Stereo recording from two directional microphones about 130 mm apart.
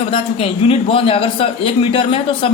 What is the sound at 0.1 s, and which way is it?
Speech, 45° left (ahead or behind).